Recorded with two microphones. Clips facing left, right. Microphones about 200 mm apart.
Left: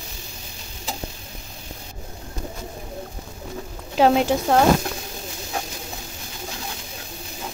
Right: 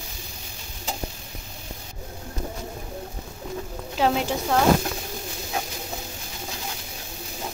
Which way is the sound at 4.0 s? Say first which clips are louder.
Left 6 dB; 45° left (ahead or behind).